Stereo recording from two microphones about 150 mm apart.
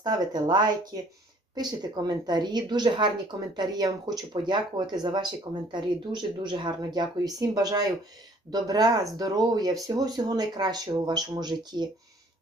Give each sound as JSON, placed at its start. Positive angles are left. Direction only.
{"t": 0.0, "sound": "speech", "side_deg": -30}